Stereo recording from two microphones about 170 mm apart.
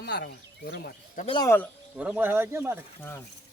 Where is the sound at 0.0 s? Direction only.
80° left.